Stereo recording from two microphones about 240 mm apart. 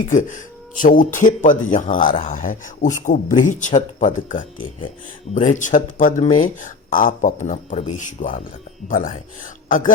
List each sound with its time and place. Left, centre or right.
0.0 s speech: left